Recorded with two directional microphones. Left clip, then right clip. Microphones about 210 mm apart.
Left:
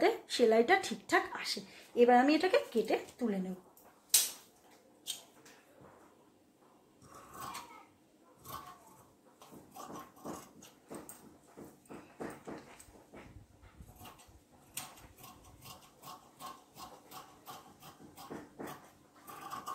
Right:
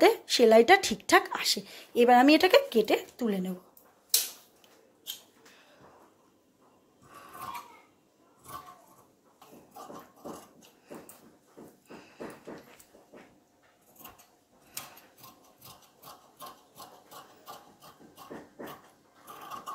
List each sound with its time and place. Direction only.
0.0 s speech: 45° right (ahead or behind)